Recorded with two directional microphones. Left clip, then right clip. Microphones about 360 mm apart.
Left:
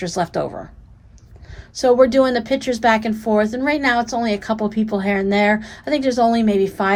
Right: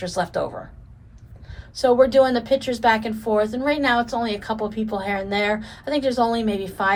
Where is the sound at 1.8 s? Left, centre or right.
Left.